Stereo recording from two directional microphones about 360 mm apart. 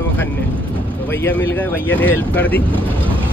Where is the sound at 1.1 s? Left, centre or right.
Centre.